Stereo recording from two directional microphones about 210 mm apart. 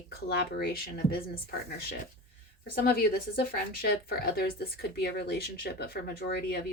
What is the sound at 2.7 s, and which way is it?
Speech, 45° left (ahead or behind).